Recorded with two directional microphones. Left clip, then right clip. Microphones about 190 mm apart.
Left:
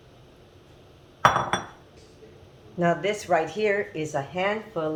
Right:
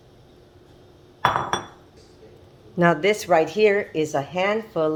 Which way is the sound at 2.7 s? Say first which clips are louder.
Right 5 dB; 55° right (ahead or behind).